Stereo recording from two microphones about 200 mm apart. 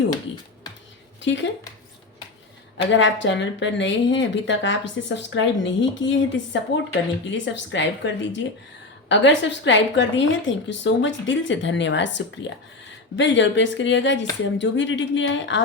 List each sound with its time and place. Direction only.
1.2 s speech: 65° left (ahead or behind)
2.9 s speech: 65° left (ahead or behind)